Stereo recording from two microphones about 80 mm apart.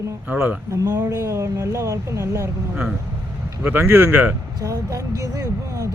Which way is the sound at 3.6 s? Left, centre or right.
Right.